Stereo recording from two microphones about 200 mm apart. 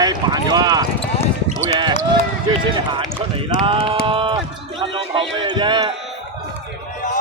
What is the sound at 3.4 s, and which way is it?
Speech, 25° right (ahead or behind).